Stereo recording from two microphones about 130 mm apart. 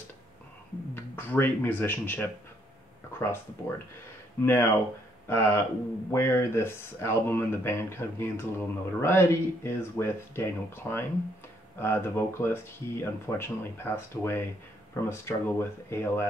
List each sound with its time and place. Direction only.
0.9 s speech: 15° left (ahead or behind)